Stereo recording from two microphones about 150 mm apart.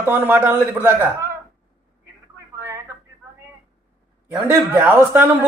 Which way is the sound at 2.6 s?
15° right (ahead or behind).